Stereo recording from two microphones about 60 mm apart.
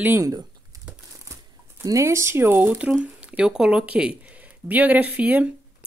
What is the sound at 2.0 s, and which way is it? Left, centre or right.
Speech, right.